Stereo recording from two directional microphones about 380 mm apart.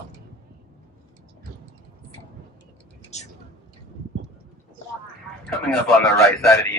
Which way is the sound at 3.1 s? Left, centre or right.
Centre.